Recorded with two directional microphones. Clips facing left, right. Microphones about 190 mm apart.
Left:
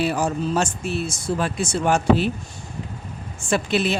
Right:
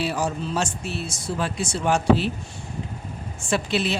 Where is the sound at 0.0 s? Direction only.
50° left (ahead or behind).